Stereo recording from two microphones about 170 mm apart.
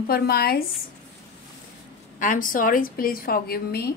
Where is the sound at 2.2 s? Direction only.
50° left (ahead or behind).